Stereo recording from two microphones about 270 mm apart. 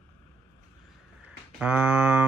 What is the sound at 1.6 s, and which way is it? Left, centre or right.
Speech, centre.